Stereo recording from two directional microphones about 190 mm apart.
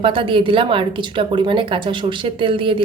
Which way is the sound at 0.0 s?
25° right (ahead or behind).